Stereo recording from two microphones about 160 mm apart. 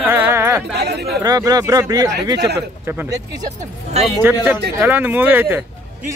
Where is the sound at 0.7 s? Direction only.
90° right.